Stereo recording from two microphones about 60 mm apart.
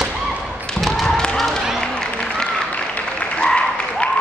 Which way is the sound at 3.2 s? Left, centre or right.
Centre.